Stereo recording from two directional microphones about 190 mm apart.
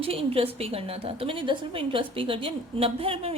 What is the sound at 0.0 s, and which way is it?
A woman's voice, 30° right (ahead or behind).